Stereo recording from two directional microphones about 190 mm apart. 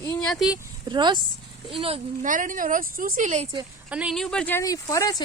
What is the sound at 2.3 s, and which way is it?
A woman's voice, 45° right (ahead or behind).